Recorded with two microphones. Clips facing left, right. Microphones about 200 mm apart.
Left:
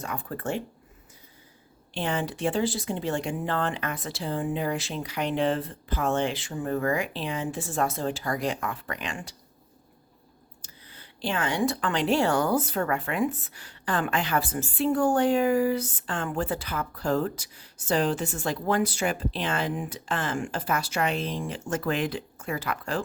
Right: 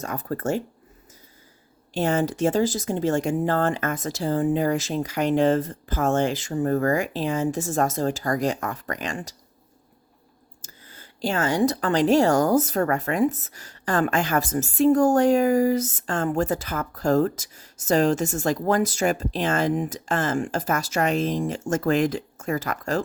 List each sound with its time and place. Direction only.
0.0 s a woman's voice: 45° right (ahead or behind)
1.9 s a woman's voice: 45° right (ahead or behind)
10.6 s a woman's voice: 45° right (ahead or behind)